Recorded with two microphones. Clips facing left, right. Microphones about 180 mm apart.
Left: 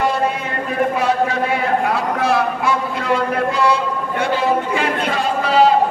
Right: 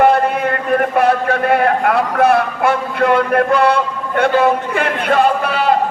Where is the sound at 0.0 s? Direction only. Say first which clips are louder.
Right 6 dB; 55° right (ahead or behind).